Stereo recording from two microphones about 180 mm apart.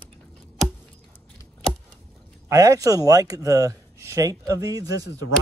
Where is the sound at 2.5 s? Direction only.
20° right (ahead or behind).